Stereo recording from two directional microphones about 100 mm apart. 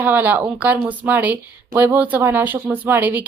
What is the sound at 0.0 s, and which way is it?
Speech, 15° right (ahead or behind).